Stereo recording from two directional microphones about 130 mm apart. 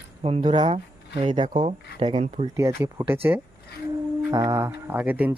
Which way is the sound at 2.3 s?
65° right (ahead or behind).